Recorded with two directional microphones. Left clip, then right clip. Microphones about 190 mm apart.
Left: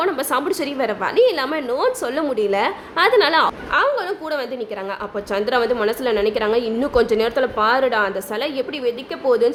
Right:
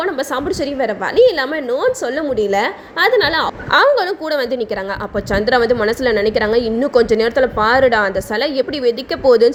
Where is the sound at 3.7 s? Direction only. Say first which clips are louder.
Right 9 dB; 25° right (ahead or behind).